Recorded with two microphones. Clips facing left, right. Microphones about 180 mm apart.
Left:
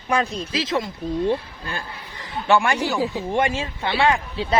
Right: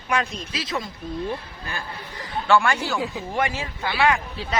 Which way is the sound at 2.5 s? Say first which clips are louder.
Left 1 dB; 20° left (ahead or behind).